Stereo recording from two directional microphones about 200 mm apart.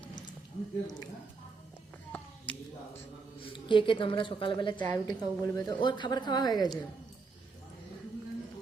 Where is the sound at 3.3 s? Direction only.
25° left (ahead or behind).